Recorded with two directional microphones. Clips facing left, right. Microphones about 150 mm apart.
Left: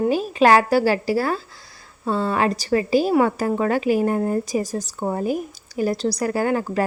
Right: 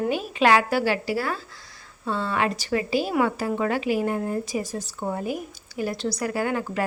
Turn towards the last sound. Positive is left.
turn(degrees=40)  # may be behind; listen again after turning